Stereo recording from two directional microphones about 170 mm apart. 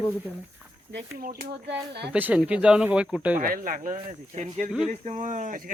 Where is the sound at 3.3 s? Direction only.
55° right (ahead or behind).